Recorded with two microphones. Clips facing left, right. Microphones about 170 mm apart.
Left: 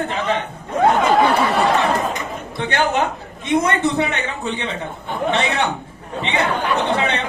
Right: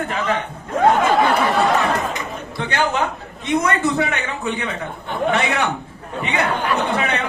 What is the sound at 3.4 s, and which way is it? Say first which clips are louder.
A man's voice: left 1 dB; 25° left (ahead or behind).